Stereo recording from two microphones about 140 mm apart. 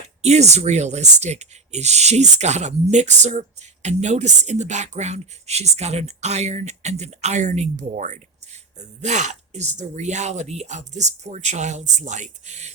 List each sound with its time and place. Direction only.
0.2 s speech: 50° right (ahead or behind)